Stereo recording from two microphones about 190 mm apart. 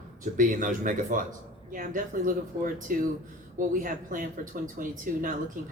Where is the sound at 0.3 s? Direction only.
45° right (ahead or behind).